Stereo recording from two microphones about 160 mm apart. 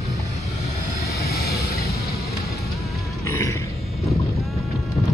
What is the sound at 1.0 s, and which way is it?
Vehicle, 75° left (ahead or behind).